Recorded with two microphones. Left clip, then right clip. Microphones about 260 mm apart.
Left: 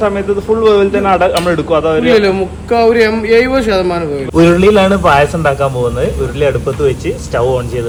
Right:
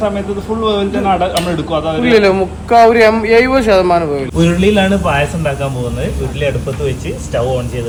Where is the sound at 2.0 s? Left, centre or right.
Centre.